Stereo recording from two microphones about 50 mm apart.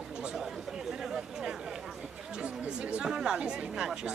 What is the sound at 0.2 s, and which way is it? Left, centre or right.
Chatter, centre.